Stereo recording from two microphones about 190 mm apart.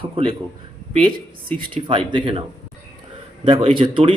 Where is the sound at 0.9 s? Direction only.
30° right (ahead or behind).